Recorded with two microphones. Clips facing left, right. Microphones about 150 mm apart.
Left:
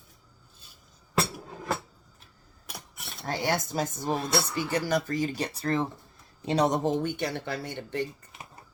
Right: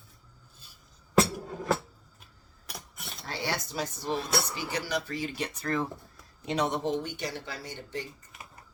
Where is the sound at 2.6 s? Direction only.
Centre (ahead or behind).